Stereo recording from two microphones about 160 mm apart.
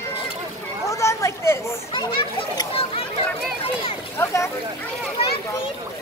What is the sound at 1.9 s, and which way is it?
Children playing, 30° left (ahead or behind).